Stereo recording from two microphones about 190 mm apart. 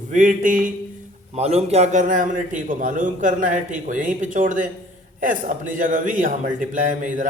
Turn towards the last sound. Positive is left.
turn(degrees=-45)  # may be behind; listen again after turning